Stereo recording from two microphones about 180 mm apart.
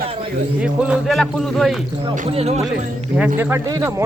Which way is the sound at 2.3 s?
35° right (ahead or behind).